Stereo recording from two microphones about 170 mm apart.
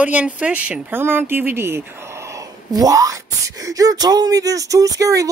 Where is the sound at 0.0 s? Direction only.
10° right (ahead or behind).